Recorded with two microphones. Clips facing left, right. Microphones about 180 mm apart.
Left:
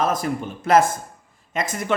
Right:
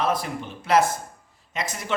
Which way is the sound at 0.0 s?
45° left (ahead or behind).